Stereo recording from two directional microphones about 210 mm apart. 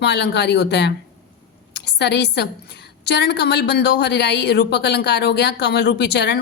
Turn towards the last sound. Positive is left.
turn(degrees=55)  # may be behind; listen again after turning